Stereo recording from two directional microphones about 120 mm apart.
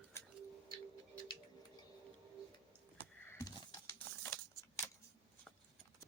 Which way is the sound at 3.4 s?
25° left (ahead or behind).